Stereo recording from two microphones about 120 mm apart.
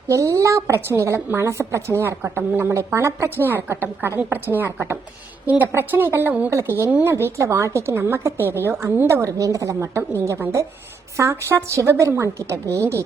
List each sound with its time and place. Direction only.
0.1 s a woman's voice: 25° right (ahead or behind)